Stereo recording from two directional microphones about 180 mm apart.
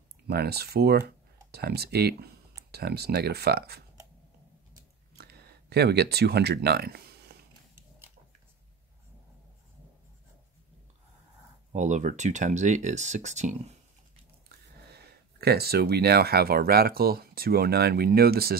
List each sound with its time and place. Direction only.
0.3 s speech: 60° right (ahead or behind)
5.1 s a sound: 60° right (ahead or behind)
11.7 s speech: 40° right (ahead or behind)
14.9 s speech: 65° right (ahead or behind)